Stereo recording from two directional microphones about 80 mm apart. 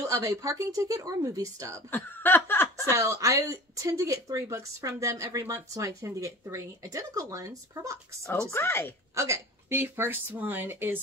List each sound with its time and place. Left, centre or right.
0.0 s speech: right
1.9 s laughter: left
2.9 s speech: right
8.5 s speech: left
9.1 s a woman's voice: right